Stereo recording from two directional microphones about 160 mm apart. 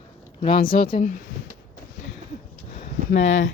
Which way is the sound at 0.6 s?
65° left (ahead or behind).